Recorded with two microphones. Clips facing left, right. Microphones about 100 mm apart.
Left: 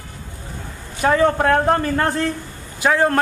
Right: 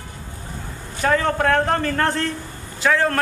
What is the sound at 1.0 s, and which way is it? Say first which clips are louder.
A man's voice: left 3 dB; 15° left (ahead or behind).